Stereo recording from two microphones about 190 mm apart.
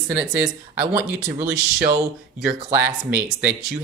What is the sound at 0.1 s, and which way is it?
Speech, 10° right (ahead or behind).